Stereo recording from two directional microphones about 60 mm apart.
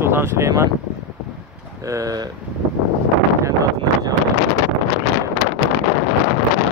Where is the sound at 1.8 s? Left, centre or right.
Right.